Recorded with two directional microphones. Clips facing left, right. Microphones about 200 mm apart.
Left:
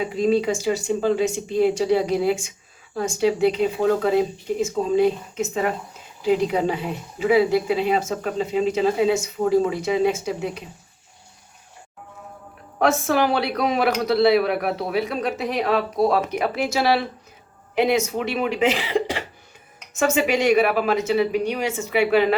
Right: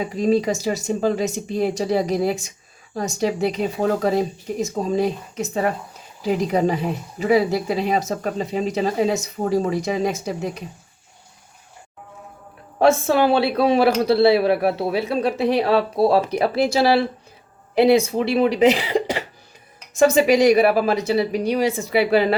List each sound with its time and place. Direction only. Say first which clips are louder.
0.0 s speech: right 1 dB; 40° right (ahead or behind)
12.8 s speech: right 3 dB; 25° right (ahead or behind)